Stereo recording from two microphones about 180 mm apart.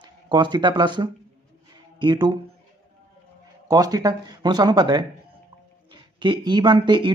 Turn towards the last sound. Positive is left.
turn(degrees=-25)  # may be behind; listen again after turning